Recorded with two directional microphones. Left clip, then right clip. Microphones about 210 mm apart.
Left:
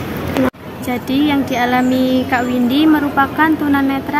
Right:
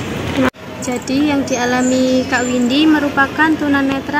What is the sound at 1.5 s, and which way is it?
Speech, 5° left (ahead or behind).